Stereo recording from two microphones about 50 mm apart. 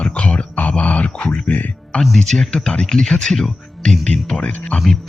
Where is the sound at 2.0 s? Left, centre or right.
Centre.